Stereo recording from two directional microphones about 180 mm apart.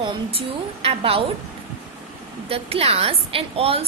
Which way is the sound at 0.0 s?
30° right (ahead or behind).